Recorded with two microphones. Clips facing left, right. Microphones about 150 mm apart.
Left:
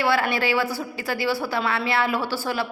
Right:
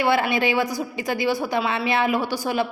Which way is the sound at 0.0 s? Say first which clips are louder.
Right 2 dB; 20° right (ahead or behind).